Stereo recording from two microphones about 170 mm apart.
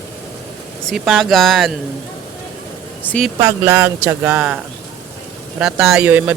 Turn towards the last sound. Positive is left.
turn(degrees=-10)  # may be behind; listen again after turning